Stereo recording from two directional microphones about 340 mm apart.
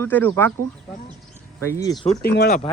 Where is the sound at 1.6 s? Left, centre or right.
Centre.